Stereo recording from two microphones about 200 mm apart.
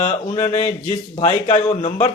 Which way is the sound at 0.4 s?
35° left (ahead or behind).